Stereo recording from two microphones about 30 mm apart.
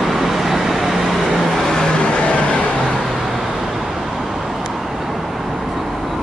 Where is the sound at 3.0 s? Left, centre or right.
Centre.